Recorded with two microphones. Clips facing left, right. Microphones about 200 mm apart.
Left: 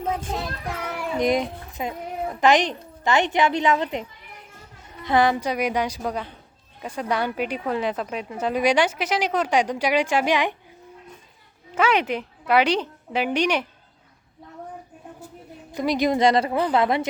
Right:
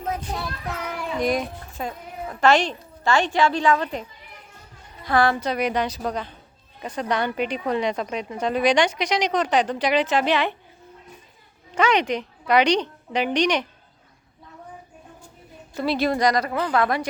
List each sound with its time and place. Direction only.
0.8 s child singing: 5° left (ahead or behind)
1.1 s a woman's voice: 20° left (ahead or behind)
5.0 s speech: 20° left (ahead or behind)
11.7 s speech: 5° left (ahead or behind)
15.7 s a woman's voice: 15° left (ahead or behind)